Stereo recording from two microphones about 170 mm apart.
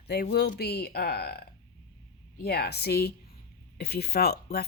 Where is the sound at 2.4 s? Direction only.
70° left (ahead or behind).